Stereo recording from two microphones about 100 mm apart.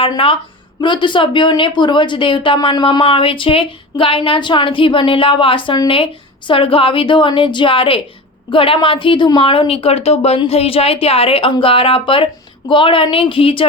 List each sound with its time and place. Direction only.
0.8 s speech: 55° left (ahead or behind)
3.0 s speech: 65° left (ahead or behind)
9.4 s speech: 65° left (ahead or behind)